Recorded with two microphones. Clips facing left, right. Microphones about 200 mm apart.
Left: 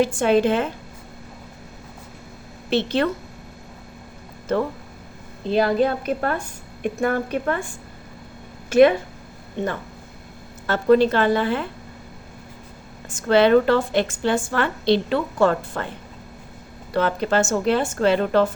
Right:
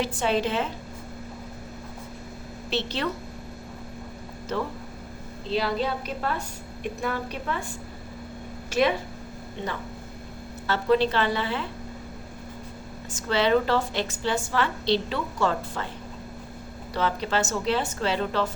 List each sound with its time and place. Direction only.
0.0 s a woman's voice: 50° left (ahead or behind)
2.6 s a woman's voice: 55° left (ahead or behind)
5.5 s a woman's voice: 50° left (ahead or behind)
8.7 s a woman's voice: 55° left (ahead or behind)
10.7 s a woman's voice: 50° left (ahead or behind)
13.1 s a woman's voice: 55° left (ahead or behind)
16.9 s a woman's voice: 55° left (ahead or behind)